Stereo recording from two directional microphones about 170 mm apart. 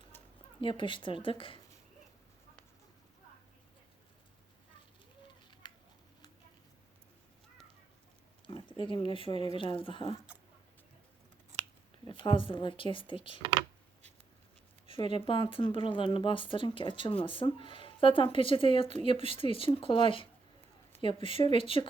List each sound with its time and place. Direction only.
0.1 s a sound: 10° left (ahead or behind)
0.6 s speech: 30° left (ahead or behind)
8.4 s a sound: 30° left (ahead or behind)
9.6 s speech: 30° left (ahead or behind)
12.0 s speech: 30° left (ahead or behind)
14.8 s speech: 30° left (ahead or behind)